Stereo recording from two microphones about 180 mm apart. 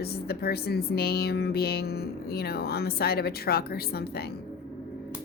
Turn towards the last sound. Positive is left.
turn(degrees=60)  # may be behind; listen again after turning